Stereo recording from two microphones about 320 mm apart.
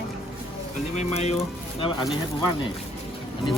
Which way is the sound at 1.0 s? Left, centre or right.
Left.